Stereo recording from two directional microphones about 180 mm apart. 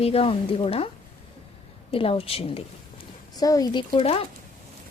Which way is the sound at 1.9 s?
30° left (ahead or behind).